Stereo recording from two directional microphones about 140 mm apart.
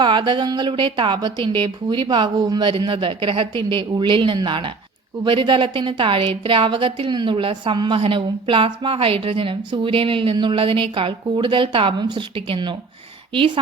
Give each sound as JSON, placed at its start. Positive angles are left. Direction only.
{"t": 0.0, "sound": "a woman's voice", "side_deg": -35}